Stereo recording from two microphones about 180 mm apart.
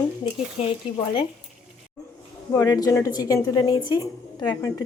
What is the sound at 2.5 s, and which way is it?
A woman's voice, 15° left (ahead or behind).